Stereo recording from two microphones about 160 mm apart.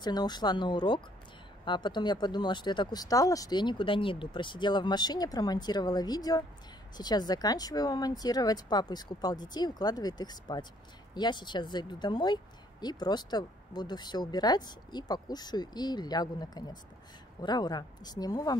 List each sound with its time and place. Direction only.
0.0 s speech: 25° left (ahead or behind)